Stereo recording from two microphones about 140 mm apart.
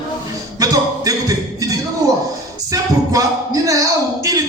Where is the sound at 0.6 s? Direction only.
25° right (ahead or behind).